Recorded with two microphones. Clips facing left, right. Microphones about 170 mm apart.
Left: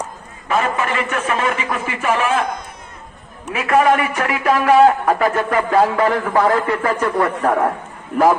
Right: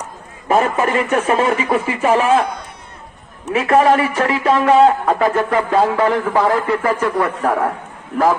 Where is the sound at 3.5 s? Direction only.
30° right (ahead or behind).